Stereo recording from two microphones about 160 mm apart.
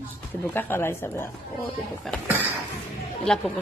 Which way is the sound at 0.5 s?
15° left (ahead or behind).